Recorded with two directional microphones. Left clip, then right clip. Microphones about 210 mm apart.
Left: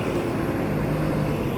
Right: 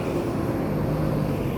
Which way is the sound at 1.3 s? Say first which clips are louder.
Left 1 dB; 15° left (ahead or behind).